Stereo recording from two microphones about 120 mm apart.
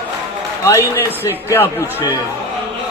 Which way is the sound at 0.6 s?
25° left (ahead or behind).